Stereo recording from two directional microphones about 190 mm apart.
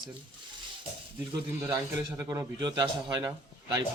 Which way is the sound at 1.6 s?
15° right (ahead or behind).